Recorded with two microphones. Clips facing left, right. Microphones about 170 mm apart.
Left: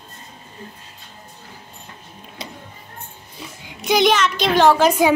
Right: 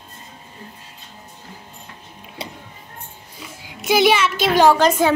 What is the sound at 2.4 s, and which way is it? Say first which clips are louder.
Music: right 2 dB; 30° right (ahead or behind).